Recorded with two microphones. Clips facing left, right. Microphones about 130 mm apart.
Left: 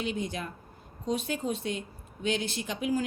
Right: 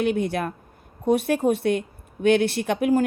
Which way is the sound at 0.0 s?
65° right (ahead or behind).